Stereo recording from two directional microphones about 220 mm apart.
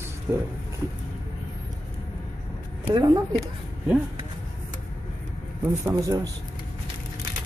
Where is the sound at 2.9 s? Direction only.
20° right (ahead or behind).